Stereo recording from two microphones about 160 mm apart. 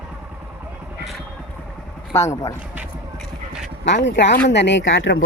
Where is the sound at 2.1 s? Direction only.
20° left (ahead or behind).